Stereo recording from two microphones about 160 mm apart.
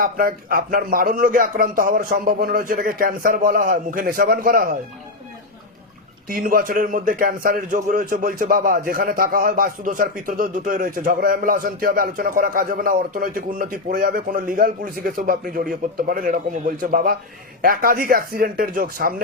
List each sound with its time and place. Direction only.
0.0 s a man's voice: 65° right (ahead or behind)
6.2 s a man's voice: 65° right (ahead or behind)